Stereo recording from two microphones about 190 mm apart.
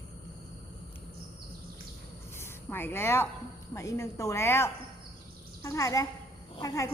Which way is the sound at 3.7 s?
15° left (ahead or behind).